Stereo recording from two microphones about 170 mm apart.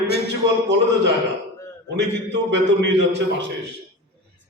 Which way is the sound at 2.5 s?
90° right.